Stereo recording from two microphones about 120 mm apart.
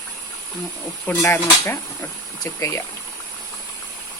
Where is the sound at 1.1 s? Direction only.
25° left (ahead or behind).